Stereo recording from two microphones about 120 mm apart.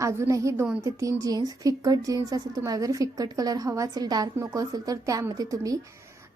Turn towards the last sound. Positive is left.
turn(degrees=-30)  # may be behind; listen again after turning